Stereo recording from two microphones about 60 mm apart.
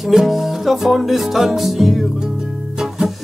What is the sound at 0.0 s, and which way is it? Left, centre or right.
Music, centre.